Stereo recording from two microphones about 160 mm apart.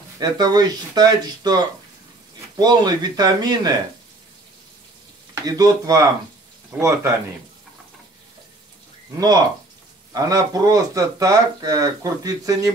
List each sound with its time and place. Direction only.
0.2 s speech: 25° right (ahead or behind)
5.3 s speech: 25° right (ahead or behind)
10.1 s speech: 20° right (ahead or behind)